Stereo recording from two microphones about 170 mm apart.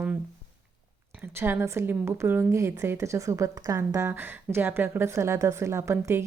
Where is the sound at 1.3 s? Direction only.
15° right (ahead or behind).